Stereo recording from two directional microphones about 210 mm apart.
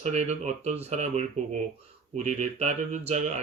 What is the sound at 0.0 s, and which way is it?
Speech, 30° right (ahead or behind).